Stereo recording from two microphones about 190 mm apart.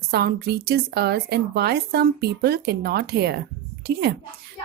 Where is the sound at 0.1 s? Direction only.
55° right (ahead or behind).